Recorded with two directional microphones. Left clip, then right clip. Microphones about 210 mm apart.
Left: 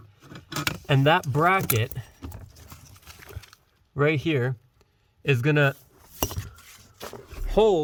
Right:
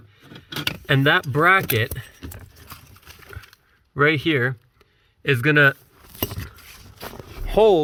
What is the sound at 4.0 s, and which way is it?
Speech, 30° left (ahead or behind).